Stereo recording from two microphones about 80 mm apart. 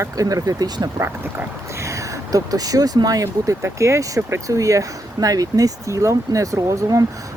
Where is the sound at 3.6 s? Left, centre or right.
Right.